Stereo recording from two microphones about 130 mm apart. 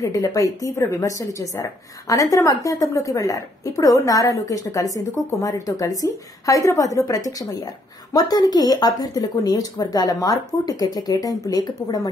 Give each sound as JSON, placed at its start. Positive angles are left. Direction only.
{"t": 0.0, "sound": "a woman's voice", "side_deg": 25}